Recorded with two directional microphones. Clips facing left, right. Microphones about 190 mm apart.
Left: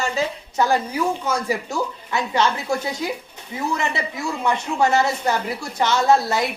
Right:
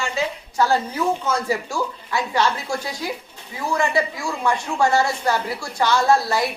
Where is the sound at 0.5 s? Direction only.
15° left (ahead or behind).